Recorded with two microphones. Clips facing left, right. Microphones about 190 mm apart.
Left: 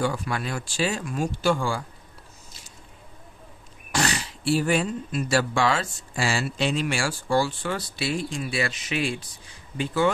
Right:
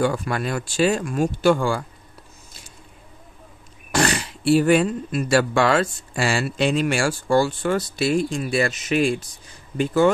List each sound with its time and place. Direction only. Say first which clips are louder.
0.0 s speech: right 5 dB; 50° right (ahead or behind)
3.9 s speech: right 5 dB; 55° right (ahead or behind)